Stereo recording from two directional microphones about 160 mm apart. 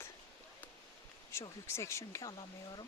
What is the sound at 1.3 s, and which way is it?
Speech, 15° left (ahead or behind).